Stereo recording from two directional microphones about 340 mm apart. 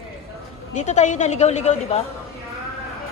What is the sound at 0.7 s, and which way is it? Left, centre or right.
A woman's voice, left.